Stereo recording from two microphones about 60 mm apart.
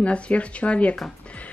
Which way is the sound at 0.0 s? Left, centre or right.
Left.